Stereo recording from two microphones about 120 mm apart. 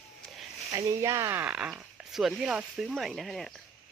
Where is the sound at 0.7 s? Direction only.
25° right (ahead or behind).